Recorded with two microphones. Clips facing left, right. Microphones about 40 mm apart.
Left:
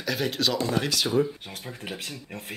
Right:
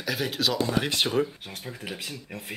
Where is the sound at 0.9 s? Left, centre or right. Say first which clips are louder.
Even; right.